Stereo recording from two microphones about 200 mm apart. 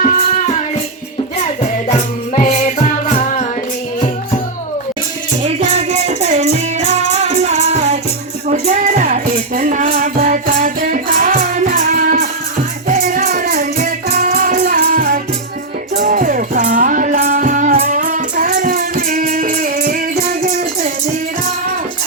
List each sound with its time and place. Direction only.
0.1 s music: 40° left (ahead or behind)
1.6 s music: 35° left (ahead or behind)
5.4 s music: 35° right (ahead or behind)
7.5 s music: 35° right (ahead or behind); by 20.2 s 50° right (ahead or behind)